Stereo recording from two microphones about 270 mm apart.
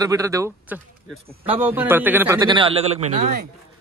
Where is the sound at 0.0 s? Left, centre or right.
Centre.